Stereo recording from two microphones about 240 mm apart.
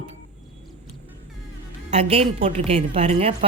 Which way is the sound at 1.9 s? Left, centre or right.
Right.